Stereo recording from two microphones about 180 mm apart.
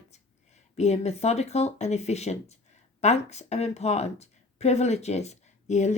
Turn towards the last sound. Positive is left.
turn(degrees=40)  # may be behind; listen again after turning